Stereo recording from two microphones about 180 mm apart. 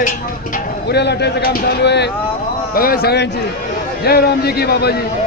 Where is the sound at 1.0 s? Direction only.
70° left (ahead or behind).